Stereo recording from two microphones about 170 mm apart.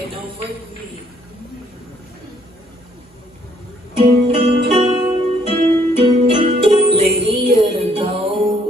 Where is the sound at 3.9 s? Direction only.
35° right (ahead or behind).